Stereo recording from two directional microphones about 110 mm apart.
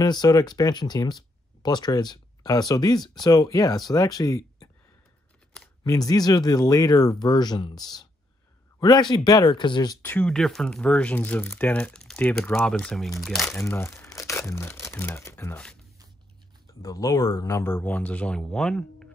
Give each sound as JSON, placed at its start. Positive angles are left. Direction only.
{"t": 0.0, "sound": "speech", "side_deg": 35}
{"t": 5.9, "sound": "speech", "side_deg": 35}
{"t": 8.7, "sound": "a sound", "side_deg": 35}
{"t": 9.1, "sound": "speech", "side_deg": 40}
{"t": 10.0, "sound": "speech", "side_deg": 10}
{"t": 13.5, "sound": "speech", "side_deg": 25}
{"t": 15.5, "sound": "speech", "side_deg": 10}
{"t": 16.8, "sound": "speech", "side_deg": 35}
{"t": 17.7, "sound": "speech", "side_deg": 15}